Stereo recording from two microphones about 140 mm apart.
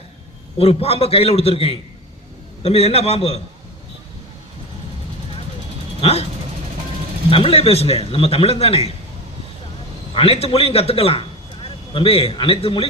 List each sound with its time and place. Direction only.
0.6 s speech: 45° left (ahead or behind)
6.0 s vehicle: 45° left (ahead or behind)
7.3 s speech: 40° left (ahead or behind)
10.2 s a man's voice: 45° left (ahead or behind)